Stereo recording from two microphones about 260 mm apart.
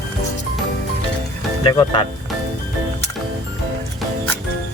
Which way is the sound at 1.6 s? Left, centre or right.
Centre.